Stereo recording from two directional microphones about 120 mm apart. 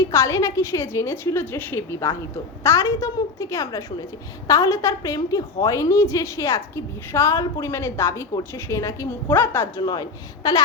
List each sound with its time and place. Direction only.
0.0 s a woman's voice: 25° left (ahead or behind)
9.8 s a woman's voice: 35° left (ahead or behind)